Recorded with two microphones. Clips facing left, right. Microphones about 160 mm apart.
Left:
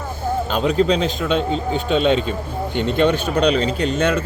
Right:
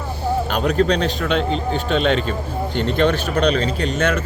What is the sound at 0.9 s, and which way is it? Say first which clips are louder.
A man's voice: left 1 dB; 10° left (ahead or behind).